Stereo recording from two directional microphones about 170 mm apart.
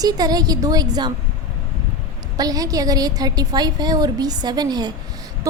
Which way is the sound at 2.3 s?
20° right (ahead or behind).